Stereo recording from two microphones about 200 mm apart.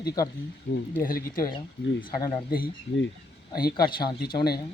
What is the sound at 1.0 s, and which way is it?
Speech, 45° left (ahead or behind).